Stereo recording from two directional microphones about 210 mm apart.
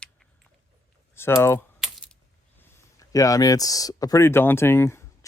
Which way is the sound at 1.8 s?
Centre (ahead or behind).